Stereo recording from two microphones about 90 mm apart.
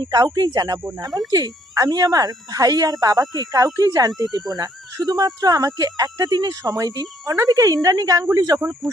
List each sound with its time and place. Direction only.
0.0 s a woman's voice: 45° right (ahead or behind)
8.8 s speech: centre (ahead or behind)